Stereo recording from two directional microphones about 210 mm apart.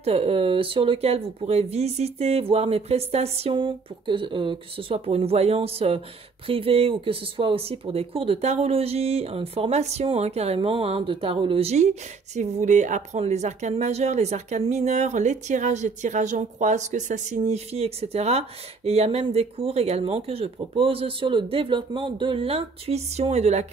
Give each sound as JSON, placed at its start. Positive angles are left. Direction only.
{"t": 0.0, "sound": "speech", "side_deg": -30}